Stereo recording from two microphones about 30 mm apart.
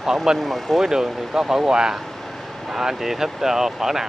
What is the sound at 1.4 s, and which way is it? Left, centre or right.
Speech, right.